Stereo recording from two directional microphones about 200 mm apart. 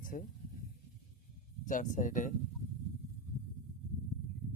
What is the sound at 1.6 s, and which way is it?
Speech, 40° left (ahead or behind).